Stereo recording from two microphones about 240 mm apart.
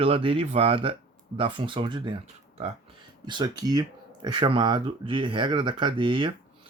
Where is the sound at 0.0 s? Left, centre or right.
Right.